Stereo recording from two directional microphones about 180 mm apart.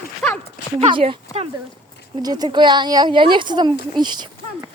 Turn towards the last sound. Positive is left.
turn(degrees=-25)  # may be behind; listen again after turning